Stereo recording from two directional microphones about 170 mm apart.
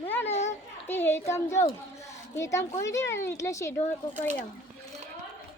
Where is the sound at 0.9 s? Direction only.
15° left (ahead or behind).